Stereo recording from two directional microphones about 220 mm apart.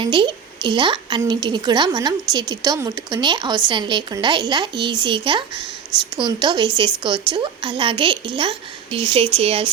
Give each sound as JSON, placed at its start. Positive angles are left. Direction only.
{"t": 0.0, "sound": "a woman's voice", "side_deg": -20}